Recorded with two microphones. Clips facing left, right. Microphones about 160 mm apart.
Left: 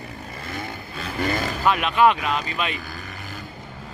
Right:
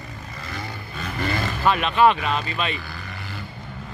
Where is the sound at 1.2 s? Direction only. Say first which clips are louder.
Left 1 dB; 40° left (ahead or behind).